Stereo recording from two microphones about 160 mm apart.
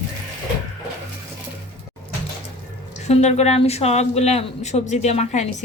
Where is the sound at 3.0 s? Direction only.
45° left (ahead or behind).